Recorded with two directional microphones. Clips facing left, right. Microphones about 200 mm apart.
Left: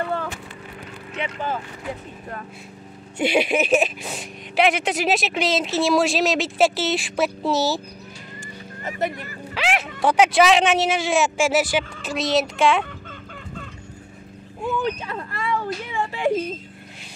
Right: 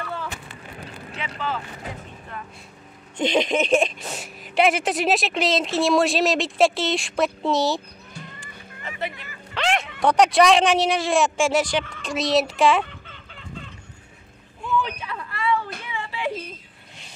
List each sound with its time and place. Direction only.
1.1 s speech: 55° left (ahead or behind)
3.2 s speech: 10° left (ahead or behind)
8.8 s speech: 45° left (ahead or behind)
9.5 s a sound: 5° left (ahead or behind)
10.0 s speech: centre (ahead or behind)
14.7 s a sound: 45° left (ahead or behind)
15.8 s whimper: 45° left (ahead or behind)